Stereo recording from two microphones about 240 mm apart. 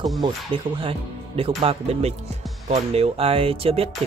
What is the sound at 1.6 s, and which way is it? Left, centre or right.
Speech, right.